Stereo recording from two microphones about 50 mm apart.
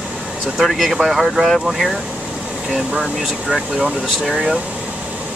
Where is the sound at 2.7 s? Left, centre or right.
Centre.